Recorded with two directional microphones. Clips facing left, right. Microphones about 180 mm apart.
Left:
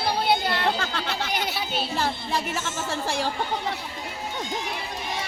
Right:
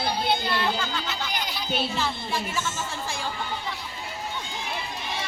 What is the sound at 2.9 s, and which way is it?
Speech, 70° left (ahead or behind).